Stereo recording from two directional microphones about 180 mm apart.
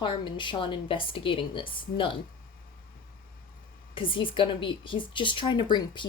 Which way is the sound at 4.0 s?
30° left (ahead or behind).